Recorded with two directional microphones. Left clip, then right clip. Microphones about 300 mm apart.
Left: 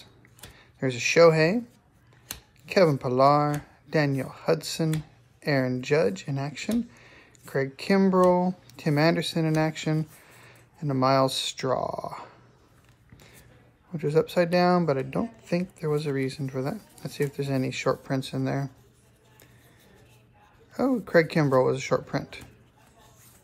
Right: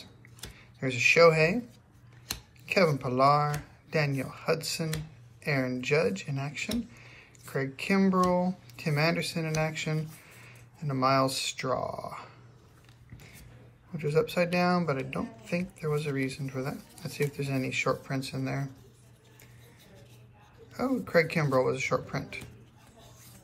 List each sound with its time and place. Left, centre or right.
1.1 s speech: centre
2.6 s speech: centre
7.0 s a sound: left
7.4 s speech: centre
13.9 s speech: centre
20.7 s speech: centre